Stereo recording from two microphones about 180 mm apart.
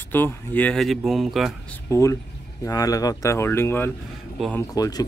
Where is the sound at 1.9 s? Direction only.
15° left (ahead or behind).